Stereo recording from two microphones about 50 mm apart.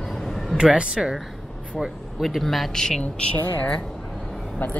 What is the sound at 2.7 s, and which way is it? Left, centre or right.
Speech, centre.